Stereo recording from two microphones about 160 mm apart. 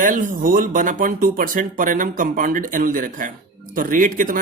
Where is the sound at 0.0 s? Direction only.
55° right (ahead or behind).